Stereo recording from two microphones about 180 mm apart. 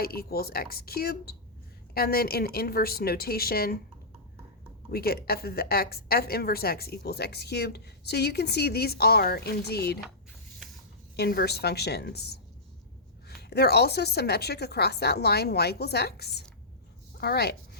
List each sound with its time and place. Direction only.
0.0 s a woman's voice: 60° left (ahead or behind)
4.9 s a woman's voice: 60° left (ahead or behind)
11.2 s a woman's voice: 65° left (ahead or behind)